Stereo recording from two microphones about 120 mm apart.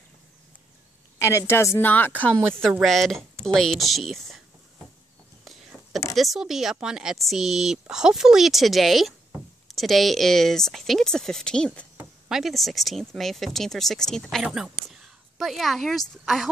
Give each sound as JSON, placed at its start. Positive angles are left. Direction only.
{"t": 1.2, "sound": "a woman's voice", "side_deg": 25}
{"t": 2.8, "sound": "speech", "side_deg": 0}
{"t": 5.4, "sound": "a sound", "side_deg": 0}
{"t": 6.1, "sound": "speech", "side_deg": 0}